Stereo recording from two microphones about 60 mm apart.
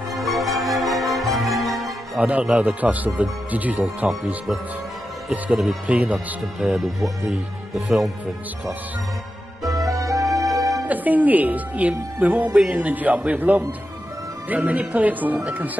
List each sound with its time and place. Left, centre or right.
0.1 s music: centre
2.1 s a woman's voice: right
5.9 s a woman's voice: right
7.7 s speech: centre
9.8 s music: right
10.9 s a woman's voice: right